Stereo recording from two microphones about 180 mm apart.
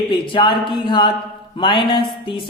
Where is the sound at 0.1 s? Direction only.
25° left (ahead or behind).